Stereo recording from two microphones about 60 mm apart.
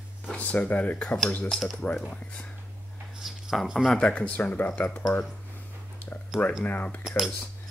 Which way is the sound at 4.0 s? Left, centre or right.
Left.